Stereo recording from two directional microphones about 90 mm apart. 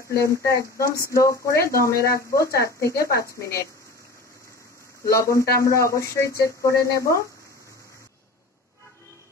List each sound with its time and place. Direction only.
0.2 s a man's voice: 35° left (ahead or behind)
5.0 s a man's voice: 35° left (ahead or behind)